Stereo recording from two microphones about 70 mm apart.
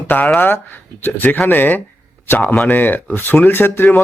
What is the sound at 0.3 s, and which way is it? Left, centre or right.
A man's voice, left.